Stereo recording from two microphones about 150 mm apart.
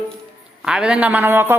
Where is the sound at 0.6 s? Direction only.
5° right (ahead or behind).